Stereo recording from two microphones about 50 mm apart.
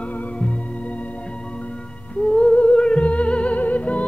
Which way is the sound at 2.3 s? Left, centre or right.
Left.